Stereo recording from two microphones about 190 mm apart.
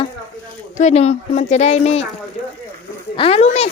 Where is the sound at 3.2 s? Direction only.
30° left (ahead or behind).